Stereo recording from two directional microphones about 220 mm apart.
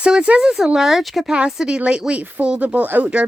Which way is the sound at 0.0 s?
5° right (ahead or behind).